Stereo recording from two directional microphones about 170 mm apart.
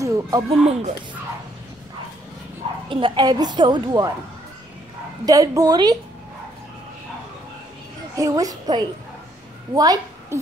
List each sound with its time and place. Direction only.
0.0 s a sound: 20° right (ahead or behind)
0.5 s speech: 40° right (ahead or behind)
2.9 s a woman's voice: 30° right (ahead or behind)
5.2 s a woman's voice: 20° right (ahead or behind)
8.2 s a woman's voice: 20° right (ahead or behind)